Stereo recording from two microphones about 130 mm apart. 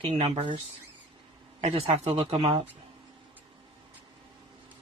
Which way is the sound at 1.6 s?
50° right (ahead or behind).